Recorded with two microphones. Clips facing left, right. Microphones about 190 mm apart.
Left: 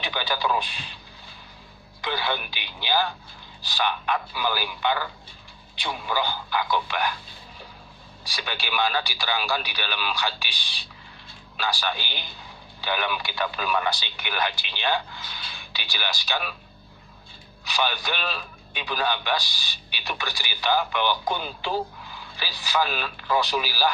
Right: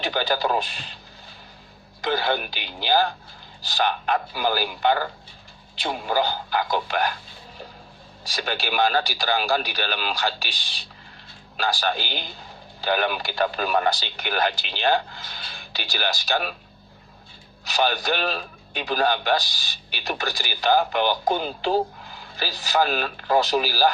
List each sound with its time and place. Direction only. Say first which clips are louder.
0.0 s a man's voice: right 4 dB; 45° right (ahead or behind)
2.0 s a man's voice: right 5 dB; 45° right (ahead or behind)
8.3 s a man's voice: right 4 dB; 45° right (ahead or behind)
17.7 s a man's voice: right 4 dB; 45° right (ahead or behind)